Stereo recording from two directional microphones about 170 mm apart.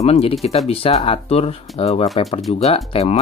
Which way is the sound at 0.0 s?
35° left (ahead or behind).